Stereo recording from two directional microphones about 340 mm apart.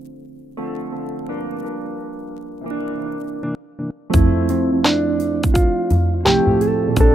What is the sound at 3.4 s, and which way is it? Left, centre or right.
Music, centre.